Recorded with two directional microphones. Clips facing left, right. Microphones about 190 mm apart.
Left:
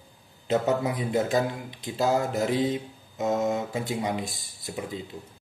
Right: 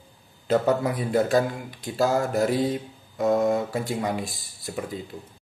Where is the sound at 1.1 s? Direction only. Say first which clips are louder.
Right 4 dB; 20° left (ahead or behind).